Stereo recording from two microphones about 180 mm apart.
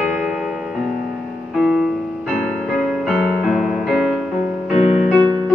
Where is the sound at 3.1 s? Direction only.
Centre (ahead or behind).